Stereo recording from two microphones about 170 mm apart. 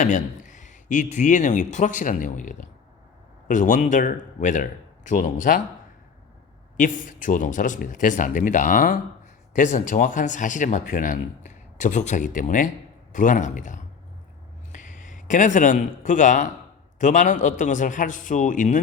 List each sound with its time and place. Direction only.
0.0 s speech: 45° left (ahead or behind)
6.7 s a man's voice: 50° left (ahead or behind)